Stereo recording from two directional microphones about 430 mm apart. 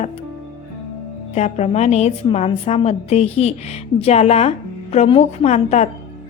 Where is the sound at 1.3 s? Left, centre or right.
Centre.